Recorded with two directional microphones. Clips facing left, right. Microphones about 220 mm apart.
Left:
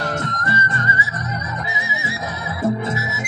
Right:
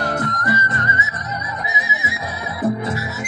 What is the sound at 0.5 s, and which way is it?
Music, 25° left (ahead or behind).